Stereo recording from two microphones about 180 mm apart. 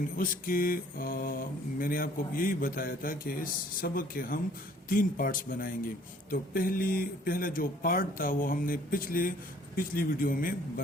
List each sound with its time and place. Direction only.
0.2 s mantra: 50° left (ahead or behind)